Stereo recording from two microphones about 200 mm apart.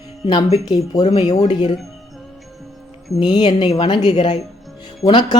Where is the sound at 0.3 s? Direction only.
20° left (ahead or behind).